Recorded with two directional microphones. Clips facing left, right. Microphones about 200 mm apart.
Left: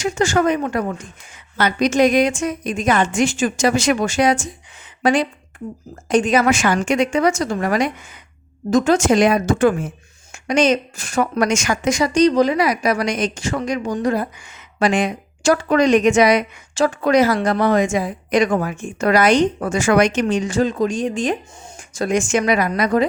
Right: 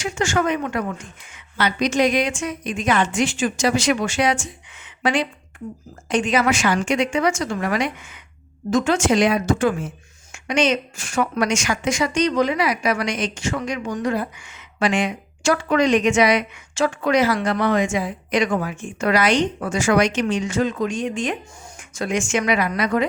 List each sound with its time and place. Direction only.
0.0 s a woman's voice: 35° left (ahead or behind); by 9.9 s 55° left (ahead or behind)
10.3 s a woman's voice: 40° left (ahead or behind)